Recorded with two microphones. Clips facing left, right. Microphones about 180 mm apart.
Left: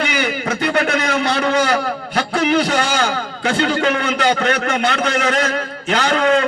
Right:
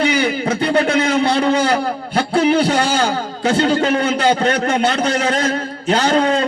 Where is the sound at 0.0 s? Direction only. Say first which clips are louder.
Right 4 dB; 30° right (ahead or behind).